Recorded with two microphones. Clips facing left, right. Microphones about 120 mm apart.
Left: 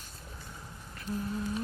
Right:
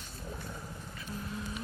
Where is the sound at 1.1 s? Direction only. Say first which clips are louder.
Left 7 dB; 35° left (ahead or behind).